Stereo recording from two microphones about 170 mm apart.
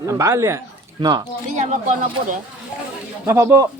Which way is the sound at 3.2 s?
15° right (ahead or behind).